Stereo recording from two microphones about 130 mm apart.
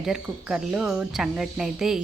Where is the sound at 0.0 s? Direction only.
5° right (ahead or behind).